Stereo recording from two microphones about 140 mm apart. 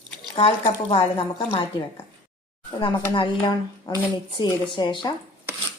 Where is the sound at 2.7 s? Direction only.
35° left (ahead or behind).